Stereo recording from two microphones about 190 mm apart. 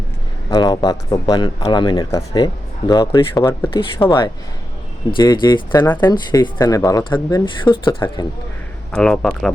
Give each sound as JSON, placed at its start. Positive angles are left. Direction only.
{"t": 0.5, "sound": "speech", "side_deg": 20}
{"t": 3.7, "sound": "speech", "side_deg": 25}
{"t": 8.9, "sound": "speech", "side_deg": 5}